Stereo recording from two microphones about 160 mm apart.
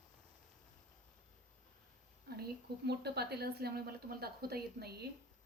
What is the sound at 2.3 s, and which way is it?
A woman's voice, 85° right.